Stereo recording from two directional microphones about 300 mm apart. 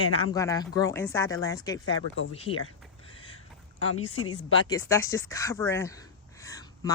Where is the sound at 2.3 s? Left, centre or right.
Centre.